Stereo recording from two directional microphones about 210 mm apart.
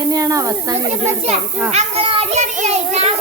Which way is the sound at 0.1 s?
15° right (ahead or behind).